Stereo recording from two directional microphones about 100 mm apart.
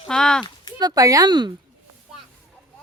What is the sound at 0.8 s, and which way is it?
Speech, 35° right (ahead or behind).